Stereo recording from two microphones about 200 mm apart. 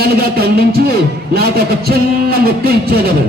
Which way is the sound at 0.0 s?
50° right (ahead or behind).